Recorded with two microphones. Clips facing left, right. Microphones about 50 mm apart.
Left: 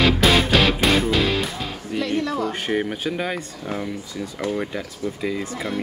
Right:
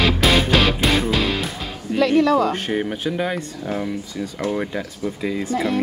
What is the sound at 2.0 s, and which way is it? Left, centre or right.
Speech, right.